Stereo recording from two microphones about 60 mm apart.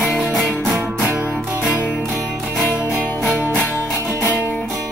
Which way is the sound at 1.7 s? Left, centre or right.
Right.